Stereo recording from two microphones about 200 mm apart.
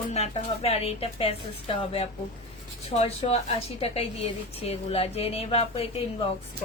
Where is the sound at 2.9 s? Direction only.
30° left (ahead or behind).